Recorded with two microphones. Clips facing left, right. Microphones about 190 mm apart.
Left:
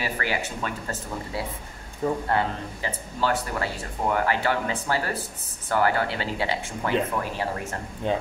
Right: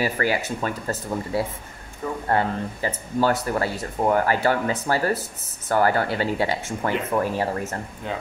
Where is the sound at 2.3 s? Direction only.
45° right (ahead or behind).